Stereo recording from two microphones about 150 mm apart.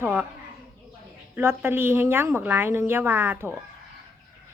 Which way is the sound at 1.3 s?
15° right (ahead or behind).